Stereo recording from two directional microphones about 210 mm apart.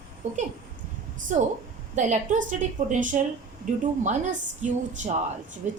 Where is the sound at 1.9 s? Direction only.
35° right (ahead or behind).